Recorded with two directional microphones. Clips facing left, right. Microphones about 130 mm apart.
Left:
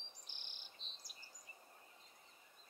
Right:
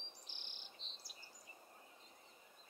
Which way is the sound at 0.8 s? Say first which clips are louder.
Right 1 dB; 55° left (ahead or behind).